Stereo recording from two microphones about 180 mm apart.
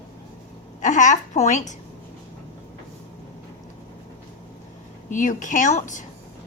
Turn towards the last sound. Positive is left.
turn(degrees=45)  # may be behind; listen again after turning